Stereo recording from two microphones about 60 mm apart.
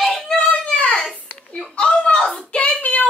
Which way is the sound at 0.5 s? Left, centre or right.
Left.